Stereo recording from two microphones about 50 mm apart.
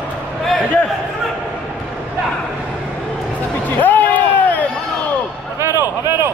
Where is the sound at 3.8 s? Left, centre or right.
Left.